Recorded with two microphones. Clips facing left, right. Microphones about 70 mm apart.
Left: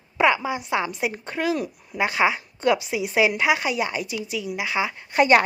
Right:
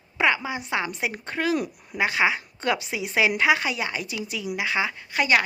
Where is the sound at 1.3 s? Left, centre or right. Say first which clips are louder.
Right 2 dB; centre.